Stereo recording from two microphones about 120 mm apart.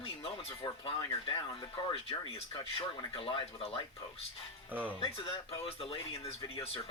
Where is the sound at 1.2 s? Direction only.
45° left (ahead or behind).